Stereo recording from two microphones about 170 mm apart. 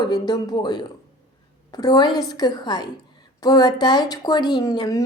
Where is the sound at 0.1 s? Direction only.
25° left (ahead or behind).